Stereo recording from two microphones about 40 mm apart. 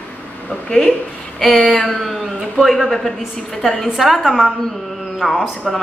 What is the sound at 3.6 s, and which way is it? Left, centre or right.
Speech, centre.